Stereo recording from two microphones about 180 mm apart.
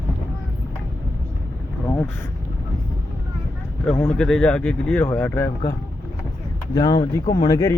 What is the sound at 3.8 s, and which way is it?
Speech, 5° left (ahead or behind).